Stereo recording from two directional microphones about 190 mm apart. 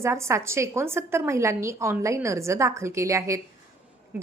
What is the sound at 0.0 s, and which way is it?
A woman's voice, 15° right (ahead or behind).